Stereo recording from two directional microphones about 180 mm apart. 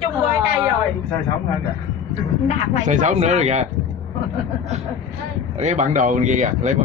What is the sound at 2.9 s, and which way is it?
Speech, 40° right (ahead or behind).